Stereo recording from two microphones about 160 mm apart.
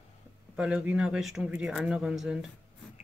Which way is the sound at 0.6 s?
5° right (ahead or behind).